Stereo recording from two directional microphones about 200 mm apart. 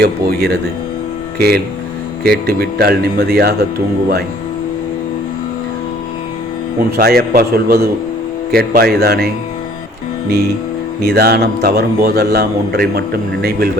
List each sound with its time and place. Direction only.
0.0 s a man's voice: 50° right (ahead or behind)
6.9 s a man's voice: 50° right (ahead or behind)
11.0 s a man's voice: 50° right (ahead or behind)